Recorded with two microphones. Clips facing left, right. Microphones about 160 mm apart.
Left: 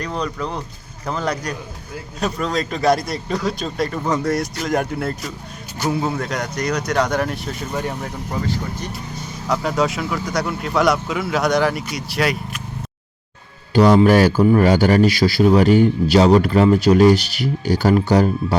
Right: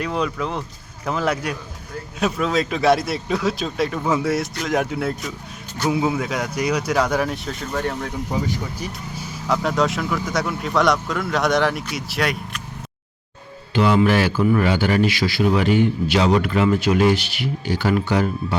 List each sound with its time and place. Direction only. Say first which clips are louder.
0.0 s speech: right 1 dB; 5° right (ahead or behind)
7.7 s speech: right 1 dB; 10° left (ahead or behind)
8.3 s speech: left 2 dB; 10° right (ahead or behind)
13.7 s a man's voice: left 5 dB; 40° left (ahead or behind)